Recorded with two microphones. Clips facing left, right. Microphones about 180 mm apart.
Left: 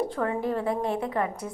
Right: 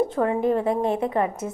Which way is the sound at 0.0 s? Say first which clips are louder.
Right 6 dB; 20° right (ahead or behind).